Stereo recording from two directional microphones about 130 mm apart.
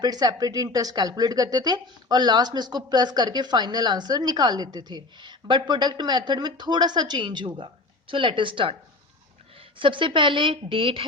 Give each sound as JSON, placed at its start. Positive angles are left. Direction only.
{"t": 0.0, "sound": "speech", "side_deg": -30}
{"t": 9.7, "sound": "speech", "side_deg": -40}